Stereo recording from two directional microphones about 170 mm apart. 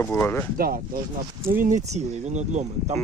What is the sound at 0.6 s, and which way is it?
Speech, 60° right (ahead or behind).